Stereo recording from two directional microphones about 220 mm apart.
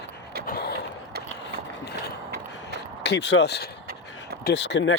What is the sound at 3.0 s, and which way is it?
Speech, 50° left (ahead or behind).